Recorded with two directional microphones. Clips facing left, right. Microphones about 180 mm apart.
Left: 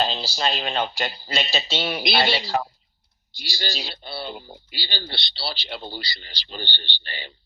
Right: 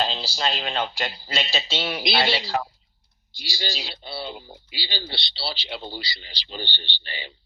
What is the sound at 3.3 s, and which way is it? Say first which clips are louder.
Speech: left 1 dB; 60° left (ahead or behind).